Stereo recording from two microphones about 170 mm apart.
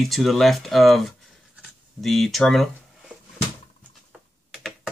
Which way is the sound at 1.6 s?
Centre (ahead or behind).